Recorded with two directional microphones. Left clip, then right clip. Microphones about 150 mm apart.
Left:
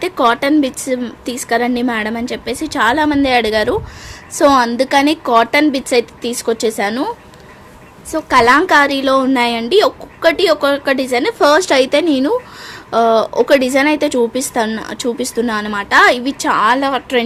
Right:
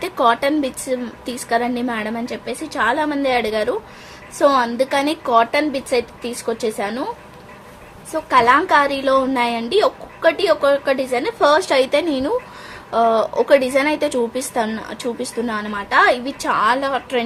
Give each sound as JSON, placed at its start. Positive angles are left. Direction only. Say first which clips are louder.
{"t": 0.0, "sound": "a woman's voice", "louder": "left 3 dB", "side_deg": 40}
{"t": 8.1, "sound": "speech", "louder": "left 3 dB", "side_deg": 55}